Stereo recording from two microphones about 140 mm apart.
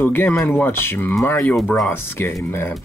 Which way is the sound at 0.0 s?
15° left (ahead or behind).